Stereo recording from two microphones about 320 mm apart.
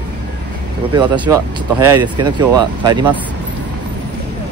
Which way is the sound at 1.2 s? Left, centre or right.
Centre.